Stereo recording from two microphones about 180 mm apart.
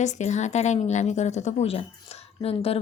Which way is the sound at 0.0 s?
40° left (ahead or behind).